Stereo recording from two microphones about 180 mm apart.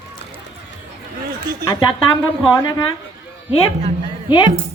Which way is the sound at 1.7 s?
25° left (ahead or behind).